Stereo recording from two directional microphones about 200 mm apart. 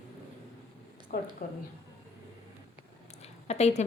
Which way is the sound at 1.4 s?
45° left (ahead or behind).